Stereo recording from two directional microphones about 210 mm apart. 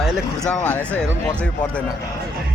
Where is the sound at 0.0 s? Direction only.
5° left (ahead or behind).